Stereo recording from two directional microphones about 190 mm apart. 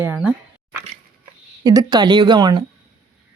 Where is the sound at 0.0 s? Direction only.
10° right (ahead or behind).